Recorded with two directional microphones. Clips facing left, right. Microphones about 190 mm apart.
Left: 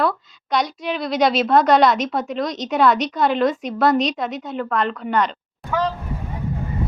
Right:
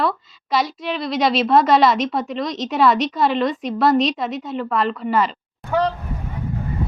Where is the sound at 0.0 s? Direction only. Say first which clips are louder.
Left 1 dB; centre (ahead or behind).